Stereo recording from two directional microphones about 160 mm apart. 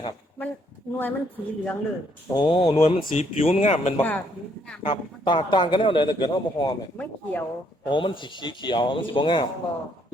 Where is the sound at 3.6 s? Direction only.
50° left (ahead or behind).